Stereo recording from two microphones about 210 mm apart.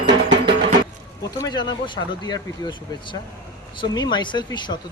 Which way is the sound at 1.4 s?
20° left (ahead or behind).